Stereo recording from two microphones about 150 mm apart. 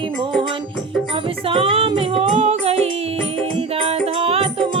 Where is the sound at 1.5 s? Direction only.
35° right (ahead or behind).